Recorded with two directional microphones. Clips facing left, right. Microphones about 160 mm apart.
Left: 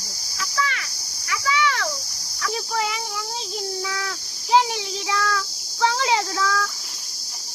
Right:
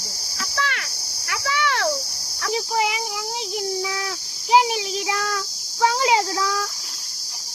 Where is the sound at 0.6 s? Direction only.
60° right (ahead or behind).